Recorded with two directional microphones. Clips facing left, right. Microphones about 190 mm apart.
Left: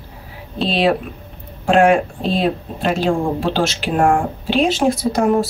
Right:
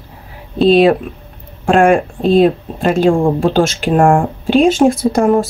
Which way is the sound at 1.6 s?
45° right (ahead or behind).